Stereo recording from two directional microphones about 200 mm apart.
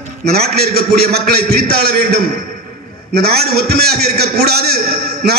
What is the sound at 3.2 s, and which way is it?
A man's voice, 50° right (ahead or behind).